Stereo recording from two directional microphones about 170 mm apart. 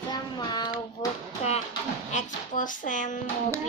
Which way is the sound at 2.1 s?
50° left (ahead or behind).